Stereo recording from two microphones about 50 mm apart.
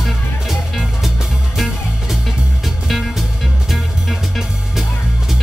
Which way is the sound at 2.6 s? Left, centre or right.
Centre.